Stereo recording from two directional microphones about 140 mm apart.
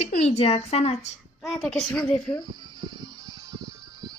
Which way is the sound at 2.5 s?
30° right (ahead or behind).